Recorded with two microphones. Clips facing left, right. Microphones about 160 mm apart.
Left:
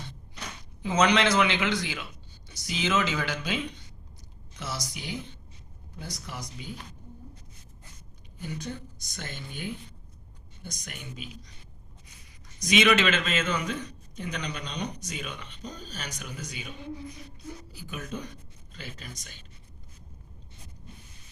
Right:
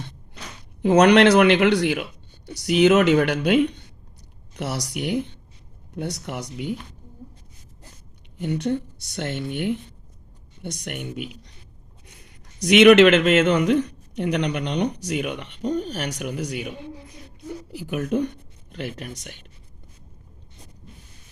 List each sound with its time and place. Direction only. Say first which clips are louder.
0.8 s speech: right 10 dB; 65° right (ahead or behind)
8.4 s speech: right 12 dB; 70° right (ahead or behind)
12.5 s a woman's voice: right 11 dB; 70° right (ahead or behind)